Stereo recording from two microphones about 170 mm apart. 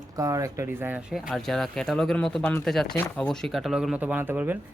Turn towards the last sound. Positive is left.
turn(degrees=-10)  # may be behind; listen again after turning